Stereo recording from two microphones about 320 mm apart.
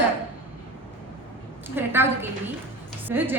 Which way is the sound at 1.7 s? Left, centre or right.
Centre.